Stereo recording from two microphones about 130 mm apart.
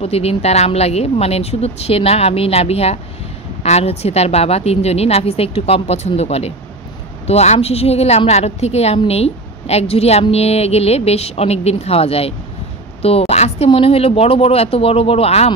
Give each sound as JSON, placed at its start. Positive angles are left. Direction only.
{"t": 0.0, "sound": "speech", "side_deg": 50}